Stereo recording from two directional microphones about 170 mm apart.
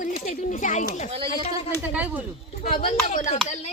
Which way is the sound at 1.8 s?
10° right (ahead or behind).